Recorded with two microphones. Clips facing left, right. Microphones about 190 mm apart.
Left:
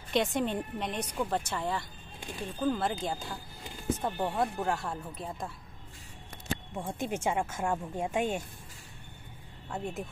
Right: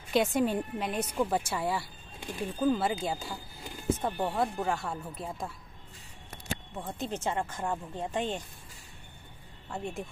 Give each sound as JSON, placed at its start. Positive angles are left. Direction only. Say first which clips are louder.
{"t": 0.1, "sound": "a woman's voice", "louder": "right 2 dB", "side_deg": -5}
{"t": 6.7, "sound": "speech", "louder": "left 2 dB", "side_deg": 10}
{"t": 9.7, "sound": "a woman's voice", "louder": "even", "side_deg": 0}